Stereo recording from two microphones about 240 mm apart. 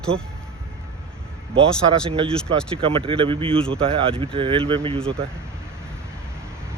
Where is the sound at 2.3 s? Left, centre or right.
Centre.